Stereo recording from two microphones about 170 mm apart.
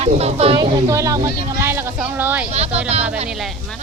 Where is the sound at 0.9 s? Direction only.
20° right (ahead or behind).